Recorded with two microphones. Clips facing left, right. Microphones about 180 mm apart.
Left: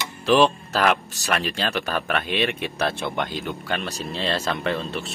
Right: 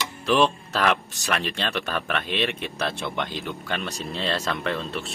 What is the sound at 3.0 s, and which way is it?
Speech, 45° left (ahead or behind).